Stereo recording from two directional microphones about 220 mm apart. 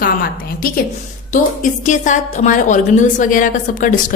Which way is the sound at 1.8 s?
35° left (ahead or behind).